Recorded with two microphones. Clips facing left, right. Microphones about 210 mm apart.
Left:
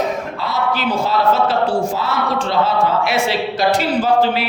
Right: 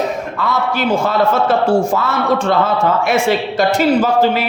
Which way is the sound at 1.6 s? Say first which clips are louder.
Right 4 dB; 25° right (ahead or behind).